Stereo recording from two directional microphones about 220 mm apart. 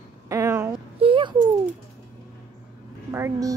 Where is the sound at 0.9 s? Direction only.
25° right (ahead or behind).